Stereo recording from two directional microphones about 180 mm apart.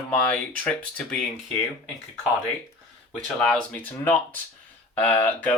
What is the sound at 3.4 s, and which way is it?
Speech, 5° left (ahead or behind).